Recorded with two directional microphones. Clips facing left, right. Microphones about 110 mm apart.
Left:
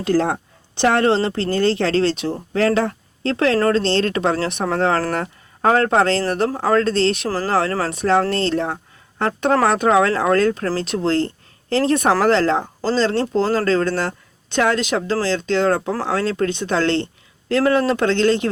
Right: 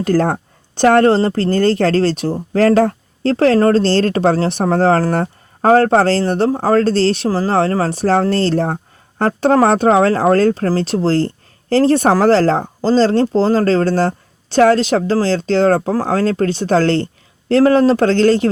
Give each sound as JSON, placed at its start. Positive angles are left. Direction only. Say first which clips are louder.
{"t": 0.0, "sound": "speech", "louder": "right 3 dB", "side_deg": -45}
{"t": 7.3, "sound": "speech", "louder": "right 5 dB", "side_deg": -20}
{"t": 7.5, "sound": "speech", "louder": "right 2 dB", "side_deg": -30}